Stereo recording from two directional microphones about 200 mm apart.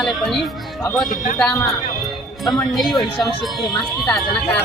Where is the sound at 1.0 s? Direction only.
40° left (ahead or behind).